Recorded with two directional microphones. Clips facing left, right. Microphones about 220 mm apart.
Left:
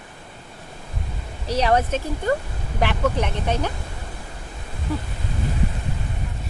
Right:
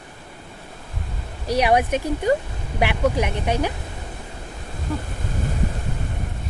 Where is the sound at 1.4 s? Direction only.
15° right (ahead or behind).